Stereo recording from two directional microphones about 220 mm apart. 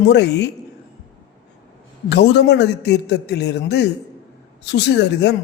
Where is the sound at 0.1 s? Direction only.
50° left (ahead or behind).